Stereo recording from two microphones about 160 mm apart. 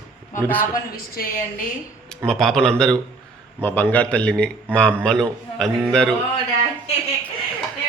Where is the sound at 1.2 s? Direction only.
70° left (ahead or behind).